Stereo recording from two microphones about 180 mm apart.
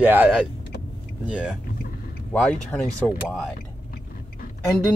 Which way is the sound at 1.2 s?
5° right (ahead or behind).